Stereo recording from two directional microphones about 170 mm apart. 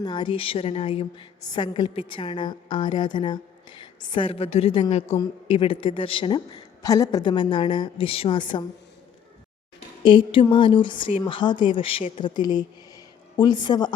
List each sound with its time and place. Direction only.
0.0 s a woman's voice: 25° left (ahead or behind)
5.0 s a woman's voice: 20° left (ahead or behind)
5.5 s a woman's voice: 30° left (ahead or behind)
6.8 s a woman's voice: 20° left (ahead or behind)
10.0 s a woman's voice: 30° left (ahead or behind)